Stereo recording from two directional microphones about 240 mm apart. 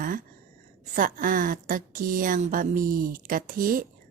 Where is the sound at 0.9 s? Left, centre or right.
Right.